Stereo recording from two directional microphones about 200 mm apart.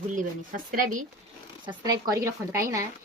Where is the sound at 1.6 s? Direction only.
20° right (ahead or behind).